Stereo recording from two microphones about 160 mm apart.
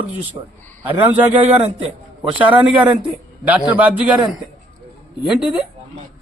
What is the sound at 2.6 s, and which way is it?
A man's voice, 5° right (ahead or behind).